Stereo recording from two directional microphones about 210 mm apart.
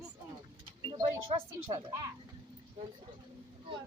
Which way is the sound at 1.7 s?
15° right (ahead or behind).